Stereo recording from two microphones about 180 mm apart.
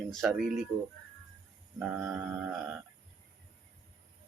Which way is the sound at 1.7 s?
5° right (ahead or behind).